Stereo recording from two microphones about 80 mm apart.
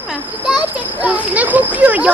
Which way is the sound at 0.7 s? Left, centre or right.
Centre.